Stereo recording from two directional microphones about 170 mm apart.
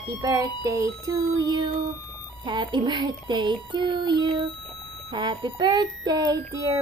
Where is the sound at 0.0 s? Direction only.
20° right (ahead or behind).